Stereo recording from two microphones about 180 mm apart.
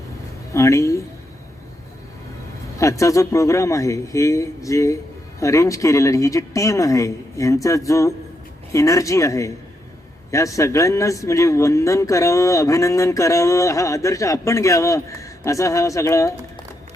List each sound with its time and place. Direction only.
0.5 s a man's voice: 15° left (ahead or behind)
2.7 s a man's voice: 15° left (ahead or behind)